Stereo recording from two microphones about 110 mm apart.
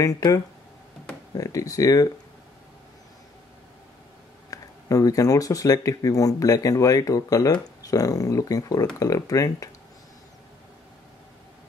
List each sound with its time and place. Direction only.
0.0 s speech: 35° left (ahead or behind)
4.5 s speech: 30° left (ahead or behind)